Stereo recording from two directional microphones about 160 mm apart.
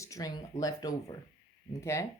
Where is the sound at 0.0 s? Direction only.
20° left (ahead or behind).